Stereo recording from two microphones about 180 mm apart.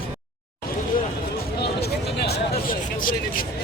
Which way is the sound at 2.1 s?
60° left (ahead or behind).